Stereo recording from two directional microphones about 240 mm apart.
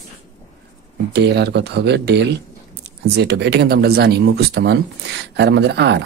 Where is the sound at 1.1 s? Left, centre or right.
Right.